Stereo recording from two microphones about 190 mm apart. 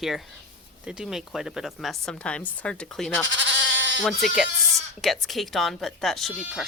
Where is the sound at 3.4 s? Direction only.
75° right (ahead or behind).